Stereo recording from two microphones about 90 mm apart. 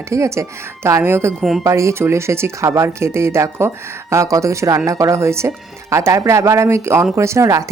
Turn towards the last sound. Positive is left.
turn(degrees=-35)  # may be behind; listen again after turning